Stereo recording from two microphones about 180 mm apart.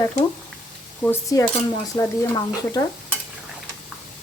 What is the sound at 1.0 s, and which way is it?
Speech, 15° left (ahead or behind).